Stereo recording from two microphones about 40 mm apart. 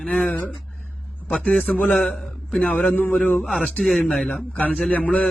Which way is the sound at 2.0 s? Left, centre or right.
Centre.